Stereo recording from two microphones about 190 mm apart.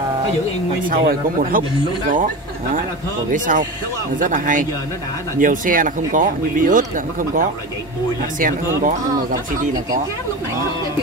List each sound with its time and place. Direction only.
0.8 s speech: 50° right (ahead or behind)
3.3 s speech: 45° right (ahead or behind)